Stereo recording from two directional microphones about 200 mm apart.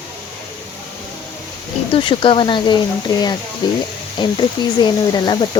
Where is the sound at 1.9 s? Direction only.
25° left (ahead or behind).